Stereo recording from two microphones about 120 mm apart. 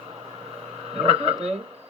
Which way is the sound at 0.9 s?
55° right (ahead or behind).